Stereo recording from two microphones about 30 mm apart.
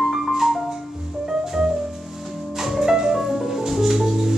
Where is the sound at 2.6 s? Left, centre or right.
Centre.